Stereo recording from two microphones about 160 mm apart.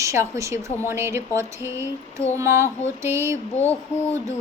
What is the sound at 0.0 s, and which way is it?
A woman's voice, 20° right (ahead or behind).